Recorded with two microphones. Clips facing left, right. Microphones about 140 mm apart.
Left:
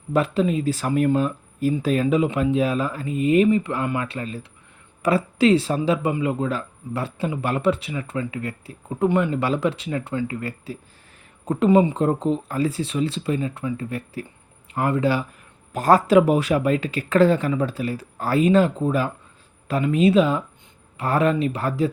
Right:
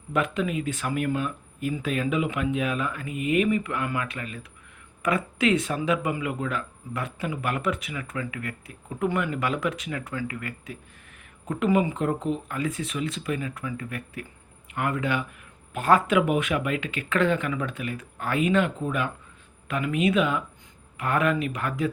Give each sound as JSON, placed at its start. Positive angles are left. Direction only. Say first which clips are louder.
{"t": 0.1, "sound": "speech", "louder": "left 6 dB", "side_deg": 30}